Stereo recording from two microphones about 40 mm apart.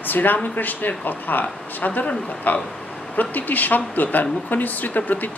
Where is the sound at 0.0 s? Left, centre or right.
Left.